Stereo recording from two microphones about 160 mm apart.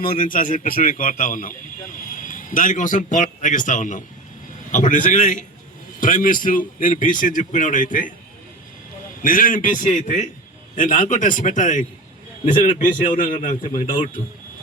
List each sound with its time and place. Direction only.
0.0 s a man's voice: 55° left (ahead or behind)
9.2 s a man's voice: 60° left (ahead or behind)